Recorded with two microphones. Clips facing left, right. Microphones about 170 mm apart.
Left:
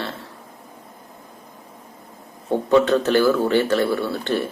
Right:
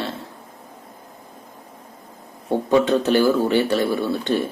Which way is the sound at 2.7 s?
15° right (ahead or behind).